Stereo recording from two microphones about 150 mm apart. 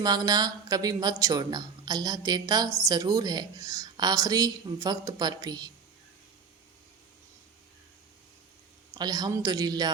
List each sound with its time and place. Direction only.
0.0 s speech: 25° right (ahead or behind)
9.0 s speech: 25° right (ahead or behind)